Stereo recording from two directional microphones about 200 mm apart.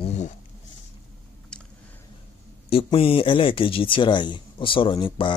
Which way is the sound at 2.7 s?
25° left (ahead or behind).